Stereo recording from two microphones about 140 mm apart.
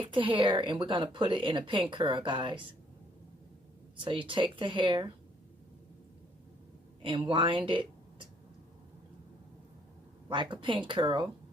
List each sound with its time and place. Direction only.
0.0 s a woman's voice: 40° right (ahead or behind)
4.3 s a woman's voice: 35° right (ahead or behind)
7.0 s a woman's voice: 35° right (ahead or behind)
10.2 s a woman's voice: 35° right (ahead or behind)